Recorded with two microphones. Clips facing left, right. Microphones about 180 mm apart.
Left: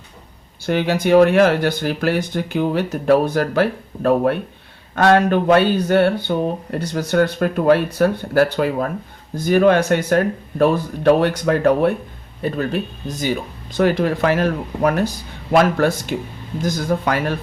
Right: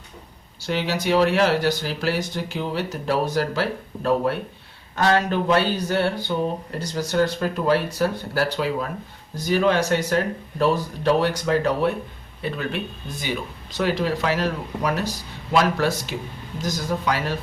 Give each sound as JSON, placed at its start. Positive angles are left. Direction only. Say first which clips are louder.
{"t": 0.6, "sound": "speech", "louder": "left 6 dB", "side_deg": 55}
{"t": 12.4, "sound": "speech", "louder": "left 6 dB", "side_deg": 45}